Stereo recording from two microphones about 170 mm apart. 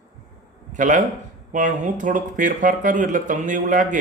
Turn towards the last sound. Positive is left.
turn(degrees=-50)  # may be behind; listen again after turning